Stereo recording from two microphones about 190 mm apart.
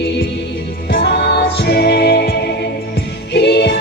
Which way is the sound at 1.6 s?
60° left (ahead or behind).